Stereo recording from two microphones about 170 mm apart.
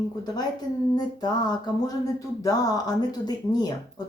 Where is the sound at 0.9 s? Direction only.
25° left (ahead or behind).